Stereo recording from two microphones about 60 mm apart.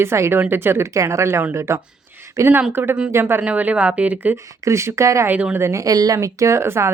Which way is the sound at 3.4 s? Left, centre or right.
Right.